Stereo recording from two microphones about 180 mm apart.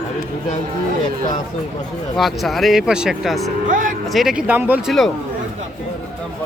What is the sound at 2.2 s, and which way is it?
Speech, centre (ahead or behind).